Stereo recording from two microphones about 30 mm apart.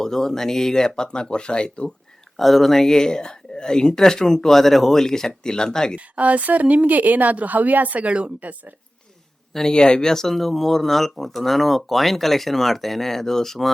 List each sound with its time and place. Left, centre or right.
0.0 s speech: centre
0.9 s speech: left
2.4 s speech: centre; by 6.0 s left
6.1 s a woman's voice: right
6.8 s a woman's voice: right
9.6 s speech: left
10.2 s speech: centre